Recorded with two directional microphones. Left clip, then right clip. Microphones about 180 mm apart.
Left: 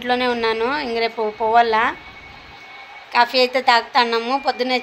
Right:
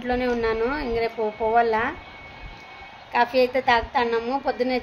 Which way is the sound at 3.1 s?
5° left (ahead or behind).